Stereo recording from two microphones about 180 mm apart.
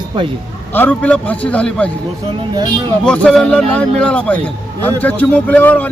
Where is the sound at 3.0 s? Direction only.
5° left (ahead or behind).